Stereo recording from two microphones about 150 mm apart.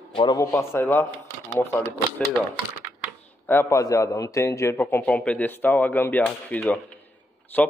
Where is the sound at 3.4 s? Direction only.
15° left (ahead or behind).